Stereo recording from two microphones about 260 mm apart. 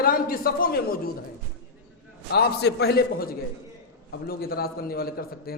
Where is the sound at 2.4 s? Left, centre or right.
Left.